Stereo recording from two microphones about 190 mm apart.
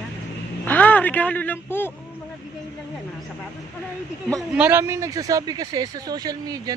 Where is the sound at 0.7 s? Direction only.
10° left (ahead or behind).